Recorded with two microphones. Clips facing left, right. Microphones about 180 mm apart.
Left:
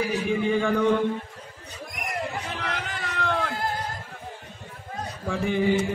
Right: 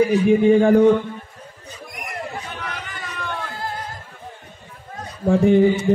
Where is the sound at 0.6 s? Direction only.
45° right (ahead or behind).